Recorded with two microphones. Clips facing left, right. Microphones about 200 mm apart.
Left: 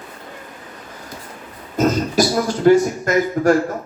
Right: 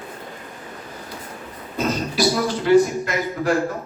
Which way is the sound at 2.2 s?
45° left (ahead or behind).